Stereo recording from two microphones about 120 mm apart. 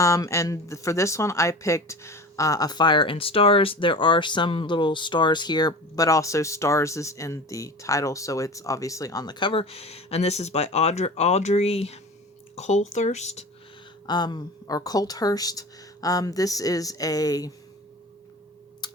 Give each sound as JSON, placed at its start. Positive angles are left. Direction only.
{"t": 0.0, "sound": "speech", "side_deg": 25}
{"t": 12.5, "sound": "speech", "side_deg": 75}
{"t": 14.1, "sound": "speech", "side_deg": 35}
{"t": 18.8, "sound": "typing", "side_deg": 35}